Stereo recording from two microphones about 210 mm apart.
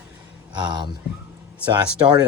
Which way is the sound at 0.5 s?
20° right (ahead or behind).